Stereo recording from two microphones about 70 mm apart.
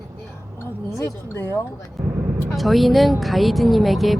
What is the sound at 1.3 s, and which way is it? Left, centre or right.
Speech, left.